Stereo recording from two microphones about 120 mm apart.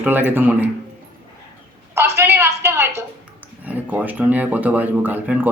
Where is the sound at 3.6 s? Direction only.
15° right (ahead or behind).